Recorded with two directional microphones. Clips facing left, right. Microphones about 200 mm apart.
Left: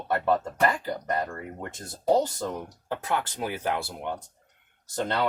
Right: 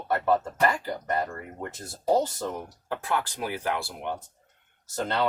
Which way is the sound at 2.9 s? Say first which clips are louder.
Even; 20° left (ahead or behind).